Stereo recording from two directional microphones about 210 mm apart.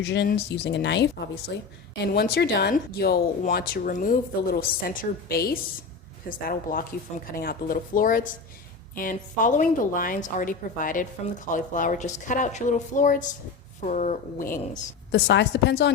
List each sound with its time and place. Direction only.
0.0 s speech: 55° left (ahead or behind)
2.1 s a woman's voice: 50° left (ahead or behind)
15.1 s speech: 55° left (ahead or behind)